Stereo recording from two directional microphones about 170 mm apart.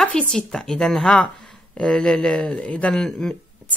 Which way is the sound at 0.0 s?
5° left (ahead or behind).